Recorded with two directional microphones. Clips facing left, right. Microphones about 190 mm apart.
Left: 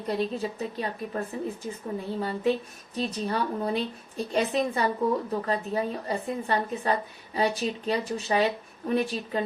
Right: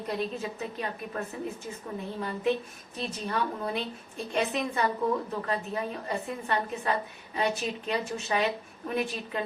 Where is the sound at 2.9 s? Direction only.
35° left (ahead or behind).